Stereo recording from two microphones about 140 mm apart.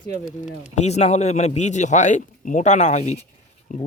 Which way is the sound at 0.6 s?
55° left (ahead or behind).